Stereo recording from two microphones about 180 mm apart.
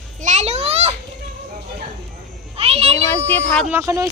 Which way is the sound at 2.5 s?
35° right (ahead or behind).